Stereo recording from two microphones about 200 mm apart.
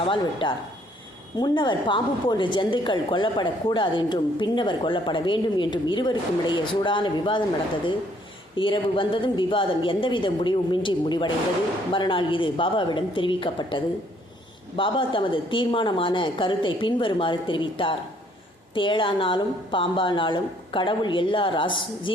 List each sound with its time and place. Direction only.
0.0 s a woman's voice: 25° left (ahead or behind)
8.5 s a woman's voice: 25° left (ahead or behind)